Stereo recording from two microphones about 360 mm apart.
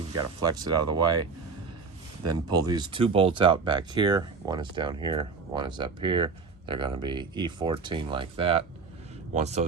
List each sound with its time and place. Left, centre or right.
0.2 s speech: centre
2.3 s speech: centre